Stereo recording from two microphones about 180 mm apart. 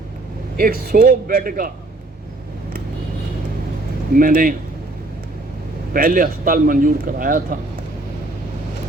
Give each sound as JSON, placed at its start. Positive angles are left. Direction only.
{"t": 0.5, "sound": "a man's voice", "side_deg": -55}
{"t": 4.1, "sound": "a man's voice", "side_deg": -50}
{"t": 5.9, "sound": "a man's voice", "side_deg": -50}